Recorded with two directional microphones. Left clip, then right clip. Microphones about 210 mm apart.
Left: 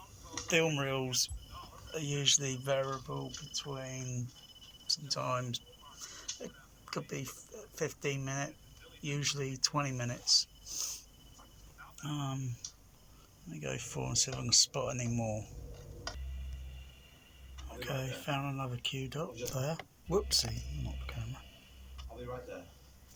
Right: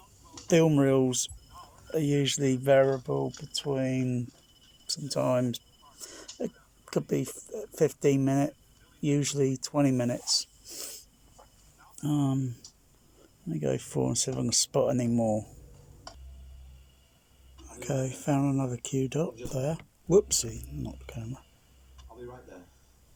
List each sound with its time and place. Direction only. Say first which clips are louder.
0.4 s speech: right 8 dB; 30° right (ahead or behind)
4.9 s a sound: right 6 dB; 35° right (ahead or behind)
6.4 s speech: right 11 dB; 35° right (ahead or behind)
12.0 s speech: right 11 dB; 25° right (ahead or behind)
13.5 s speech: right 10 dB; 30° right (ahead or behind)
17.7 s speech: right 6 dB; 30° right (ahead or behind)
21.9 s a sound: left 1 dB; centre (ahead or behind)